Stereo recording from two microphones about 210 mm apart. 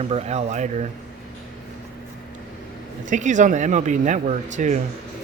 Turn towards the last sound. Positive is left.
turn(degrees=-35)  # may be behind; listen again after turning